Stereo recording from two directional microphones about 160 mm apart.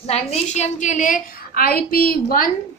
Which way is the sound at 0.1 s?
40° left (ahead or behind).